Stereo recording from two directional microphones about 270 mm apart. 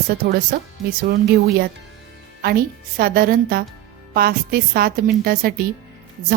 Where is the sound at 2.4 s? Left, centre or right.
Right.